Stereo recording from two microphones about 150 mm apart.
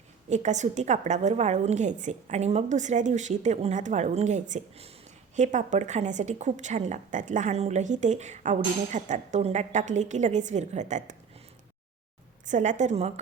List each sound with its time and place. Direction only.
0.3 s a woman's voice: 50° right (ahead or behind)
12.5 s a woman's voice: 55° right (ahead or behind)